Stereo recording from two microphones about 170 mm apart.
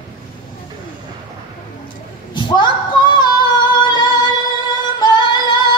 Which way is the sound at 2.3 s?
25° left (ahead or behind).